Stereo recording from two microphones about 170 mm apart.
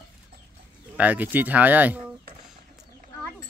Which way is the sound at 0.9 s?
10° right (ahead or behind).